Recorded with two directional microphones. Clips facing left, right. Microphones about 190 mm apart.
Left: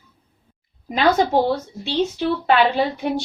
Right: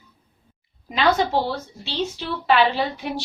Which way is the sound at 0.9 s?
50° left (ahead or behind).